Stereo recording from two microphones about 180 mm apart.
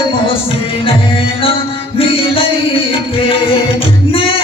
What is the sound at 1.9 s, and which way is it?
Music, 30° left (ahead or behind).